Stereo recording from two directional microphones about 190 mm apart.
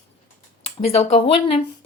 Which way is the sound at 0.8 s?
30° left (ahead or behind).